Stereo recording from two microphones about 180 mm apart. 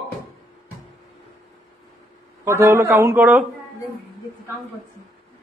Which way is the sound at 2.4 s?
15° right (ahead or behind).